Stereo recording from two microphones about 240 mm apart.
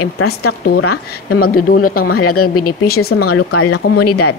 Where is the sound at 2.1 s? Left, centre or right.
Left.